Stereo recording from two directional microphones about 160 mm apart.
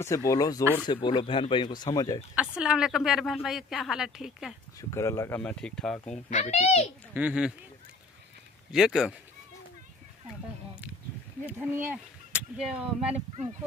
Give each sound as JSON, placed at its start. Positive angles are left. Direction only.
{"t": 0.3, "sound": "speech", "side_deg": 25}
{"t": 2.3, "sound": "a woman's voice", "side_deg": -5}
{"t": 4.7, "sound": "speech", "side_deg": 20}
{"t": 5.4, "sound": "a woman's voice", "side_deg": 5}
{"t": 6.3, "sound": "a child's voice", "side_deg": 45}
{"t": 7.2, "sound": "speech", "side_deg": -5}
{"t": 8.7, "sound": "a woman's voice", "side_deg": -5}
{"t": 11.7, "sound": "speech", "side_deg": -10}
{"t": 13.0, "sound": "speech", "side_deg": -40}